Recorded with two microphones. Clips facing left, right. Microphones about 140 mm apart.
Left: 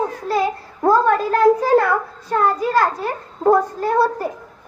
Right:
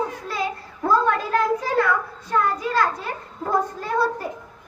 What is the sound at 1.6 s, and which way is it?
A child's voice, 45° left (ahead or behind).